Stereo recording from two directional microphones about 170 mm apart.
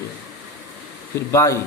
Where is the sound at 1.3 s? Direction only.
15° left (ahead or behind).